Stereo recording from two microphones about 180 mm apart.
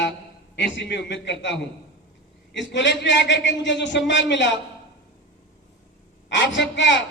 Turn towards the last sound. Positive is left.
turn(degrees=85)